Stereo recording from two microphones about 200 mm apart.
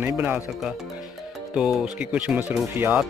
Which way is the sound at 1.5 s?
5° right (ahead or behind).